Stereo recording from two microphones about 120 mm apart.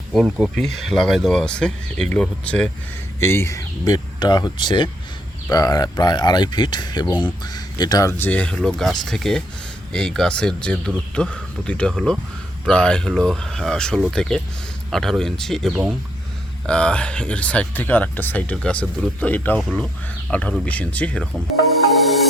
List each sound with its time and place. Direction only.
0.1 s speech: centre (ahead or behind)
3.2 s speech: 20° left (ahead or behind)
8.2 s speech: 10° left (ahead or behind)
15.7 s speech: 5° right (ahead or behind)
16.6 s speech: 10° left (ahead or behind)
22.0 s music: centre (ahead or behind)